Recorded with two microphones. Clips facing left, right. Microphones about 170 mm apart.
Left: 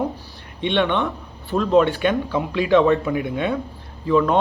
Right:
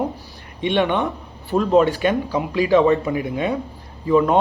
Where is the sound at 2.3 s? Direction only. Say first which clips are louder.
Even; centre (ahead or behind).